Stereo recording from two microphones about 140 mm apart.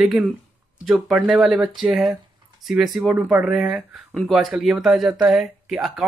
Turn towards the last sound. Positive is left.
turn(degrees=0)  # may be behind; listen again after turning